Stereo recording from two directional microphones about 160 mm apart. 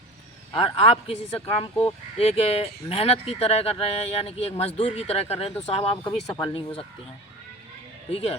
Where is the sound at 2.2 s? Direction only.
40° left (ahead or behind).